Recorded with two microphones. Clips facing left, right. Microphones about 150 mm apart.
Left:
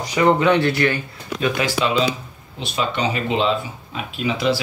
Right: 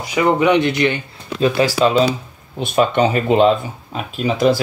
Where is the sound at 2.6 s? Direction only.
50° right (ahead or behind).